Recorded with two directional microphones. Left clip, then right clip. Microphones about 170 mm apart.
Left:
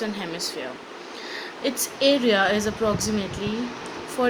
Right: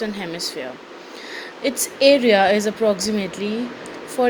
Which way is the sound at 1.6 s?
30° right (ahead or behind).